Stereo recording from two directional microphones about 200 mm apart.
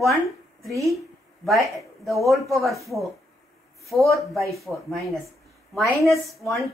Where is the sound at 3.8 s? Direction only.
Centre (ahead or behind).